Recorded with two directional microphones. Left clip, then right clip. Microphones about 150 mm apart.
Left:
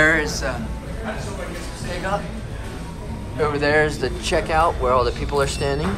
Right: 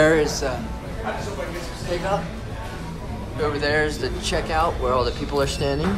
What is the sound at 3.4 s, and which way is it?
Speech, 5° right (ahead or behind).